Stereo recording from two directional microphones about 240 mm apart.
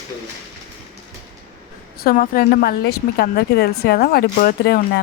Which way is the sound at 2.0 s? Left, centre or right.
Left.